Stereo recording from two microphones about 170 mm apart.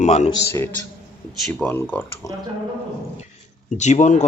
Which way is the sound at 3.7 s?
45° left (ahead or behind).